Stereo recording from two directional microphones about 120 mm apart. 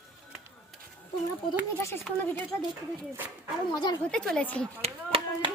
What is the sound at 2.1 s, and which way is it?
Speech, 5° left (ahead or behind).